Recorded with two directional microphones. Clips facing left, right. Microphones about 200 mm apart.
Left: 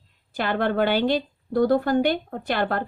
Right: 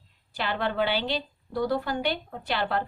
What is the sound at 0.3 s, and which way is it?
Speech, 50° left (ahead or behind).